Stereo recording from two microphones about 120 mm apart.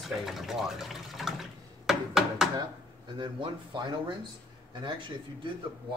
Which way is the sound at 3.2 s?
40° right (ahead or behind).